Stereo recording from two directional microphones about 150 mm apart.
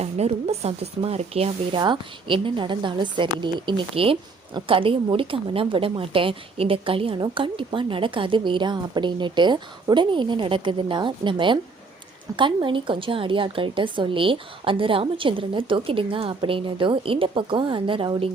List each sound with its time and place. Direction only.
0.0 s speech: 45° right (ahead or behind)